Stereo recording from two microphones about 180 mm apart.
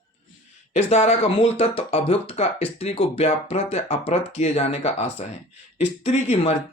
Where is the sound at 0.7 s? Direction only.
35° left (ahead or behind).